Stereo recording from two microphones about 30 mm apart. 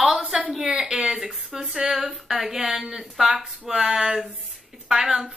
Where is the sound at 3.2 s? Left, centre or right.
Right.